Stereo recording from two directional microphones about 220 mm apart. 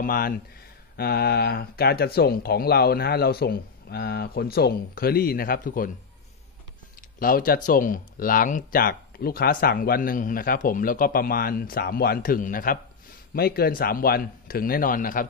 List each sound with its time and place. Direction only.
0.0 s speech: 40° left (ahead or behind)
7.2 s speech: 40° left (ahead or behind)